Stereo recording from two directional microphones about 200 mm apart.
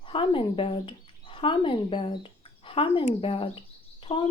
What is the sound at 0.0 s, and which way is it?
Speech, 25° left (ahead or behind).